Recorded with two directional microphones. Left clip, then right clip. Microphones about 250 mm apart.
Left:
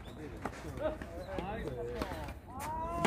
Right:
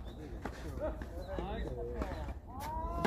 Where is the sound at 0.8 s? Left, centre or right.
Left.